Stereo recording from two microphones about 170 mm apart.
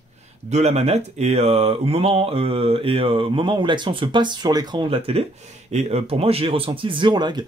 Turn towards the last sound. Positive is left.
turn(degrees=-25)  # may be behind; listen again after turning